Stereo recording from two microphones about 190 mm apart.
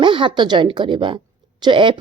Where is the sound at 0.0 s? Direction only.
25° right (ahead or behind).